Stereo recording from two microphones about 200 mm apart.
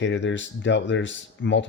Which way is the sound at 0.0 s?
65° left (ahead or behind).